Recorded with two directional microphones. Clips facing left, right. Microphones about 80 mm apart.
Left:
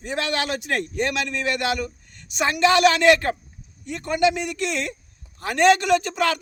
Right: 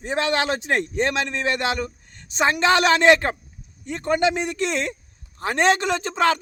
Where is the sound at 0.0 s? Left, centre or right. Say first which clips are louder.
Right 3 dB; right.